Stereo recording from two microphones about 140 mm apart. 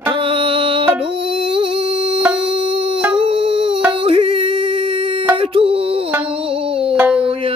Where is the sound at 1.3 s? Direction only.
40° right (ahead or behind).